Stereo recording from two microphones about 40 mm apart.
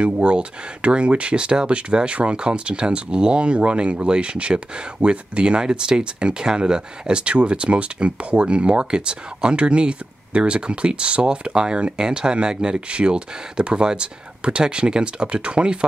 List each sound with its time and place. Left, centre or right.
0.0 s speech: right